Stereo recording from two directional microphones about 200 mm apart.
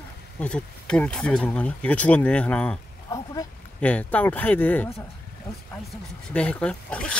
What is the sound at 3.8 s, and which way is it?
Speech, 5° left (ahead or behind).